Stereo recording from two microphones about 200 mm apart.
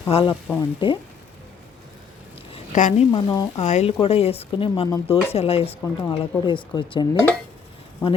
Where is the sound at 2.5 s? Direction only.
35° left (ahead or behind).